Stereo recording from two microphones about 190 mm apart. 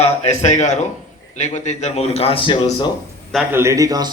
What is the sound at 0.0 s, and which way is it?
Speech, 35° left (ahead or behind).